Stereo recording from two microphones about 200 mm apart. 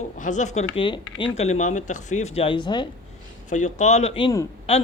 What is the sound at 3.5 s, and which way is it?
Speech, 35° left (ahead or behind).